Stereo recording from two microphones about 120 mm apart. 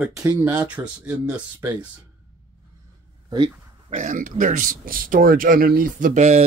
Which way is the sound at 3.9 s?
90° right.